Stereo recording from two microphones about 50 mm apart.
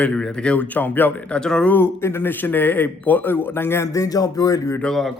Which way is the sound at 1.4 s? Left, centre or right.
Centre.